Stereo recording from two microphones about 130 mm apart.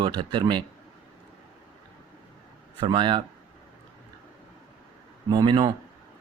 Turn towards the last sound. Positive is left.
turn(degrees=-35)  # may be behind; listen again after turning